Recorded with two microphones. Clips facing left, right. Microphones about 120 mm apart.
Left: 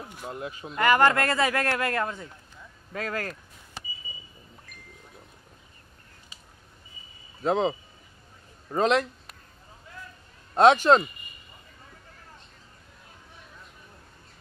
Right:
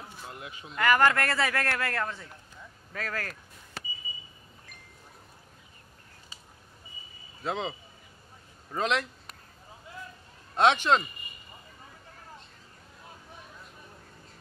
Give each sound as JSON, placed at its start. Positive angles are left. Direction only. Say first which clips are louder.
{"t": 0.4, "sound": "speech", "louder": "left 7 dB", "side_deg": 40}
{"t": 0.7, "sound": "a man's voice", "louder": "left 3 dB", "side_deg": 20}
{"t": 7.4, "sound": "speech", "louder": "left 8 dB", "side_deg": 40}
{"t": 8.7, "sound": "speech", "louder": "left 6 dB", "side_deg": 40}
{"t": 10.5, "sound": "speech", "louder": "left 6 dB", "side_deg": 40}